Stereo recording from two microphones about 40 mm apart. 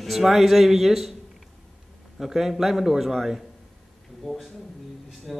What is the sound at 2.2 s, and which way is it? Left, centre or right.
A man's voice, centre.